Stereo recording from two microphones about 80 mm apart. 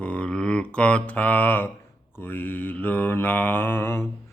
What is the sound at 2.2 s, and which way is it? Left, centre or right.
Speech, left.